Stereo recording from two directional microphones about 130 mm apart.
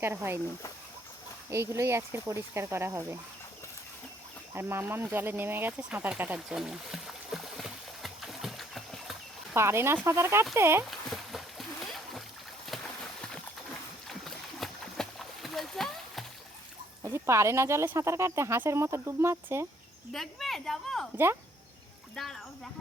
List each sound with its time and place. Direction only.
0.0 s speech: 20° right (ahead or behind)
1.5 s speech: 20° right (ahead or behind)
4.5 s speech: 15° right (ahead or behind)
5.1 s a sound: 15° right (ahead or behind); by 9.6 s centre (ahead or behind)
9.6 s speech: 20° right (ahead or behind)
11.1 s splash: centre (ahead or behind)
12.6 s a sound: centre (ahead or behind)
17.0 s speech: 20° right (ahead or behind)
20.1 s speech: centre (ahead or behind)
22.1 s speech: 5° left (ahead or behind)